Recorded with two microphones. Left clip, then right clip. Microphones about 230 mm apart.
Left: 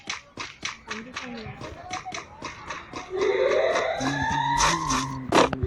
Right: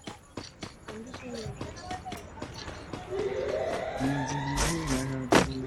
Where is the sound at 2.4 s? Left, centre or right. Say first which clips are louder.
Left 5 dB; centre.